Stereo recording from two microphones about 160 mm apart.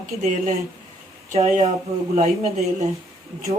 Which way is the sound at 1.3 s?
45° right (ahead or behind).